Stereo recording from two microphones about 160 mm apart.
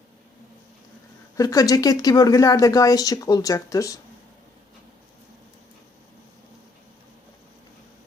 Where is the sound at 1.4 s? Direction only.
20° left (ahead or behind).